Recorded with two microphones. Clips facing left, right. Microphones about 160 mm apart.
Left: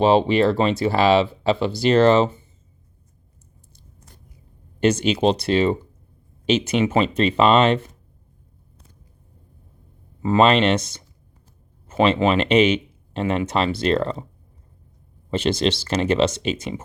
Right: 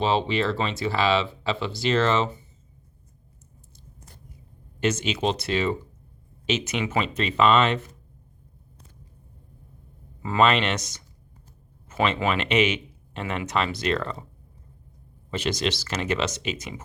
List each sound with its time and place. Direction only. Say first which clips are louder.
0.0 s speech: left 7 dB; 45° left (ahead or behind)
4.8 s speech: left 7 dB; 35° left (ahead or behind)
10.2 s speech: left 5 dB; 30° left (ahead or behind)
15.3 s speech: left 6 dB; 30° left (ahead or behind)